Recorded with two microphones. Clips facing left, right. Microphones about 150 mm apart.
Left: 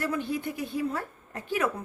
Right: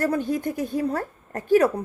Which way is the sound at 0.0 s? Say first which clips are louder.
Right 6 dB; 45° right (ahead or behind).